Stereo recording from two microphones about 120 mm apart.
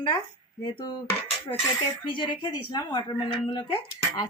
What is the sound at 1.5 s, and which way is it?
Dishes, 50° left (ahead or behind).